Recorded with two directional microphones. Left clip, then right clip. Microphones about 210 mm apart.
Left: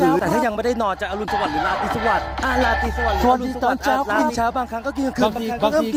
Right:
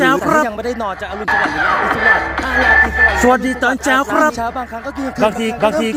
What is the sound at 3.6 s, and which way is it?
Speech, centre (ahead or behind).